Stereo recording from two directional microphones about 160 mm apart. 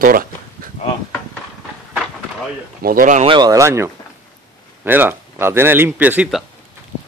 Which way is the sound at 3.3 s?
25° right (ahead or behind).